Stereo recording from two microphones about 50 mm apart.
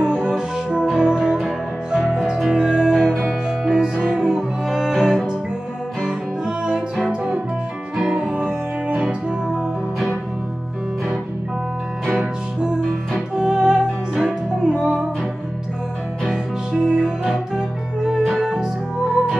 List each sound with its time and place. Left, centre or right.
0.0 s music: centre
2.5 s music: centre
12.2 s music: centre
16.3 s music: centre